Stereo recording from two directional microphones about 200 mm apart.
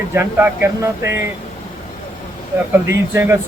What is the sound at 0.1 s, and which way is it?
Speech, 10° right (ahead or behind).